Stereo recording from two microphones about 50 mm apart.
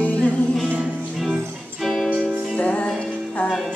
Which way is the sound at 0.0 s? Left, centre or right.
Left.